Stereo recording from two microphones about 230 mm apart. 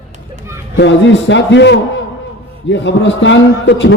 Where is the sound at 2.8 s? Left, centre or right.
Left.